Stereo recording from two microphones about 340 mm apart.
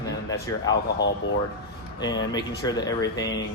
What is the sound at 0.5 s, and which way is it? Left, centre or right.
Speech, centre.